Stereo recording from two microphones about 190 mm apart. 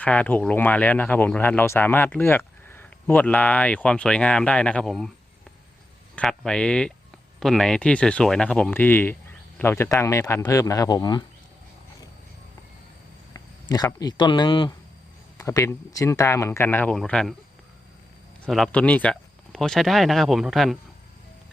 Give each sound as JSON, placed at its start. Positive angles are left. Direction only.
{"t": 0.0, "sound": "speech", "side_deg": 10}
{"t": 6.1, "sound": "speech", "side_deg": 5}
{"t": 13.3, "sound": "a sound", "side_deg": 20}
{"t": 14.0, "sound": "speech", "side_deg": 25}
{"t": 18.4, "sound": "speech", "side_deg": 5}